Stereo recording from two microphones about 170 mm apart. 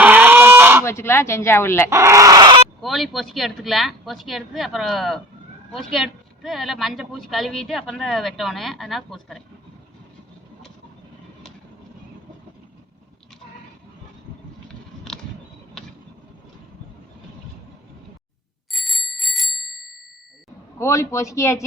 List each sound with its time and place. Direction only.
0.0 s goose: 10° right (ahead or behind)
0.9 s speech: 15° left (ahead or behind)
1.9 s speech: 15° right (ahead or behind)
2.8 s a woman's voice: centre (ahead or behind)
14.7 s vehicle: 5° left (ahead or behind)
18.7 s bicycle bell: centre (ahead or behind)
20.7 s speech: 15° left (ahead or behind)